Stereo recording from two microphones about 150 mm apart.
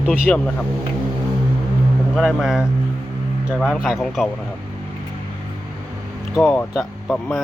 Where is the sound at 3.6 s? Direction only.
5° right (ahead or behind).